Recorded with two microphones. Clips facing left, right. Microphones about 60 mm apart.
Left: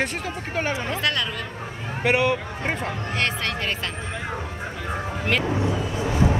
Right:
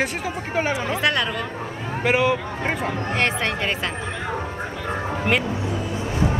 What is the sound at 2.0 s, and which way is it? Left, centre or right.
Speech, centre.